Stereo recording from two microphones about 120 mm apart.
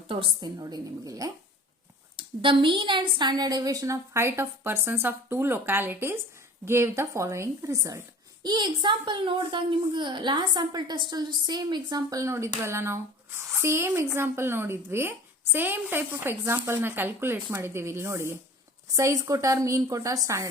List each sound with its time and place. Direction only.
0.1 s a woman's voice: 45° right (ahead or behind)
2.1 s a woman's voice: 45° right (ahead or behind); by 8.0 s 25° right (ahead or behind)
8.4 s a woman's voice: 40° right (ahead or behind)